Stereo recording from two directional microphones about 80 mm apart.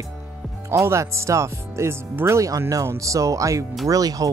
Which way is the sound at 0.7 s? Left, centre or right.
Right.